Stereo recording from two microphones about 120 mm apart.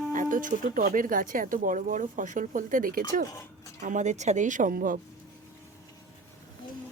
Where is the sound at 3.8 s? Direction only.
85° right.